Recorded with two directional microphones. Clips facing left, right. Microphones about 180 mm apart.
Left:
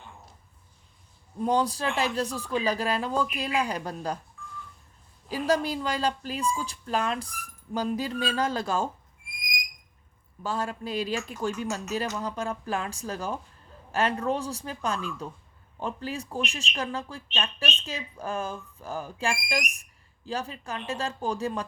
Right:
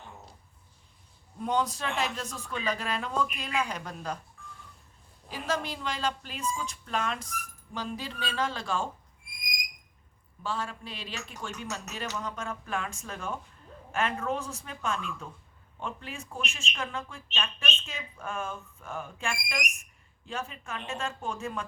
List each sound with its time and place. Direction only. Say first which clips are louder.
1.4 s speech: left 4 dB; 35° left (ahead or behind)
5.3 s speech: left 7 dB; 35° left (ahead or behind)
10.4 s speech: left 4 dB; 40° left (ahead or behind)